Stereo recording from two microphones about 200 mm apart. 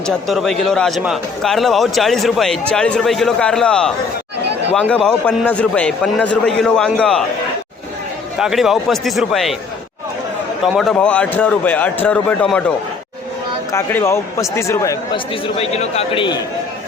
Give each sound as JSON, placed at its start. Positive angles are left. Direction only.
{"t": 0.0, "sound": "a man's voice", "side_deg": 0}
{"t": 8.4, "sound": "a man's voice", "side_deg": 0}
{"t": 10.8, "sound": "a man's voice", "side_deg": 5}
{"t": 15.1, "sound": "a man's voice", "side_deg": 25}